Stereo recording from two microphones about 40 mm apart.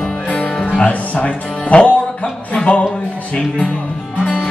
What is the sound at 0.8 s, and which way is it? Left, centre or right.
Speech, left.